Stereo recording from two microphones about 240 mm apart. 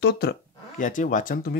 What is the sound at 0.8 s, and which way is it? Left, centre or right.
Speech, left.